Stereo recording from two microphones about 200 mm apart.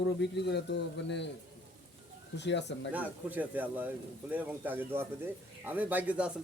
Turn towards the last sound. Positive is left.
turn(degrees=-5)  # may be behind; listen again after turning